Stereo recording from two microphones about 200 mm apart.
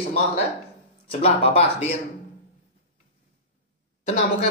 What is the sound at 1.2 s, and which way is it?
Speech, 30° left (ahead or behind).